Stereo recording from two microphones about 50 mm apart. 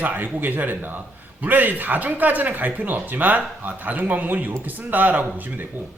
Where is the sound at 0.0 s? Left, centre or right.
Right.